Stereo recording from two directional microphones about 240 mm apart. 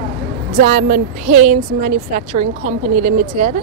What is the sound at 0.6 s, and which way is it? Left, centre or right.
Speech, right.